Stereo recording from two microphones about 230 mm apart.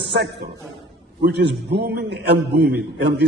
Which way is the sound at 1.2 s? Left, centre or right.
Right.